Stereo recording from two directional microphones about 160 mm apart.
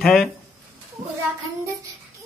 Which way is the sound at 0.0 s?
Centre (ahead or behind).